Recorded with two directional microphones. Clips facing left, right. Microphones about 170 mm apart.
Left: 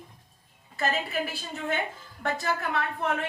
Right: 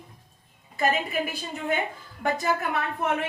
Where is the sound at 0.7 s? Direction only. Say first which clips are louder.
Right 3 dB; 15° right (ahead or behind).